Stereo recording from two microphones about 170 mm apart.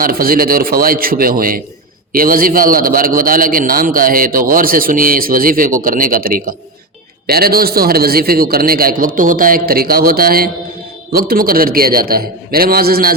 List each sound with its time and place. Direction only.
0.0 s a man's voice: 60° right (ahead or behind)